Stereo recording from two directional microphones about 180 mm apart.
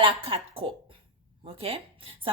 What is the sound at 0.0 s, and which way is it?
A woman's voice, 30° right (ahead or behind).